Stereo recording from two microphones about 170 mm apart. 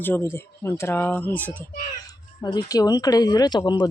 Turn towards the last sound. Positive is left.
turn(degrees=25)  # may be behind; listen again after turning